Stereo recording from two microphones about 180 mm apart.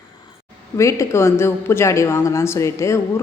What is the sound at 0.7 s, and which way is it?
A woman's voice, 15° left (ahead or behind).